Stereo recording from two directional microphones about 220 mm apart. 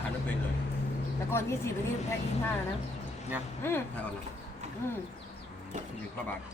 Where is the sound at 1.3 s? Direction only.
10° left (ahead or behind).